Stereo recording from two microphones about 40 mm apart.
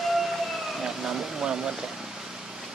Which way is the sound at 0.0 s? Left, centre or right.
Centre.